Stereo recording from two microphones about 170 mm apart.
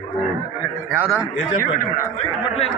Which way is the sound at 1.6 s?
50° left (ahead or behind).